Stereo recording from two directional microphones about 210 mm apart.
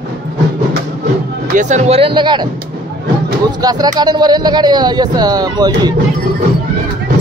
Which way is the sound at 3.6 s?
20° right (ahead or behind).